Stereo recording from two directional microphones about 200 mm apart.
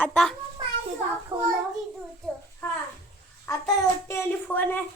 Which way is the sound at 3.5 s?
15° left (ahead or behind).